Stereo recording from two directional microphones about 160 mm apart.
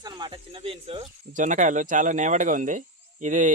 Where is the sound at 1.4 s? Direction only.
50° right (ahead or behind).